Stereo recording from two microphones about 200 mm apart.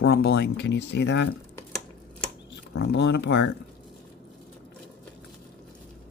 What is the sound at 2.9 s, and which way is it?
Speech, 55° left (ahead or behind).